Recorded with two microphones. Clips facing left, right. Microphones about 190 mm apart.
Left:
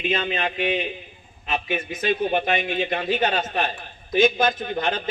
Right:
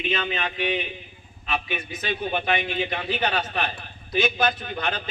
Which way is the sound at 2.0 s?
45° left (ahead or behind).